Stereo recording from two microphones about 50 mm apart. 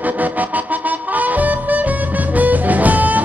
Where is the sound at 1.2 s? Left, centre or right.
Right.